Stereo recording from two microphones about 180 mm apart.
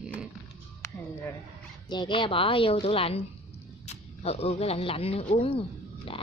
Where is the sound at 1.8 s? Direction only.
25° left (ahead or behind).